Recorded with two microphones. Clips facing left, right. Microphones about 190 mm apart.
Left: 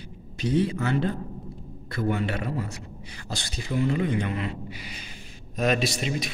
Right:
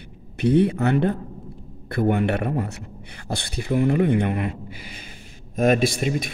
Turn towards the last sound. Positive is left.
turn(degrees=-50)  # may be behind; listen again after turning